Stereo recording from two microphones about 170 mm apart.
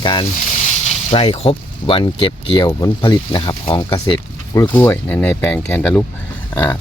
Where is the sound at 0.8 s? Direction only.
35° left (ahead or behind).